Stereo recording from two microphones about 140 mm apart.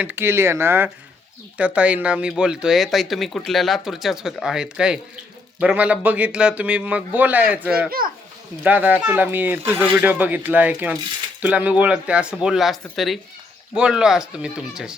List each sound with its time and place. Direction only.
0.0 s a man's voice: 15° right (ahead or behind)
7.9 s a child's voice: 90° right
8.6 s a man's voice: 10° right (ahead or behind)